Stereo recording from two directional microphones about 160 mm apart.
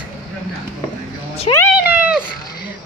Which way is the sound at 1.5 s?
40° left (ahead or behind).